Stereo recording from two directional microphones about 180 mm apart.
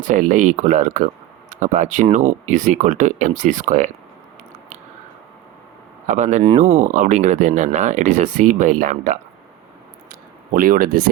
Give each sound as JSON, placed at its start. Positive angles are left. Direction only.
{"t": 0.0, "sound": "speech", "side_deg": -45}
{"t": 6.1, "sound": "speech", "side_deg": -45}
{"t": 10.1, "sound": "a sound", "side_deg": -50}